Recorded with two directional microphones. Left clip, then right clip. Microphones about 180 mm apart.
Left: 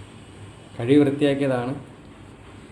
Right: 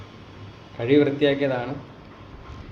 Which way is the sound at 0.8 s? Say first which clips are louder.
Even; 70° left (ahead or behind).